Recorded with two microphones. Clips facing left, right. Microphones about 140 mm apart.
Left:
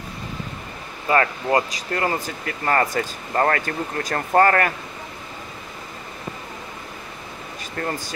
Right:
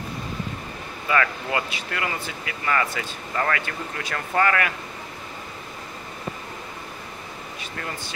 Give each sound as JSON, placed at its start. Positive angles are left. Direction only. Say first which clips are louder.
{"t": 1.0, "sound": "speech", "louder": "left 4 dB", "side_deg": 35}
{"t": 7.7, "sound": "speech", "louder": "left 8 dB", "side_deg": 40}